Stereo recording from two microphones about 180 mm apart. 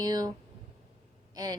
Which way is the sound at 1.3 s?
20° right (ahead or behind).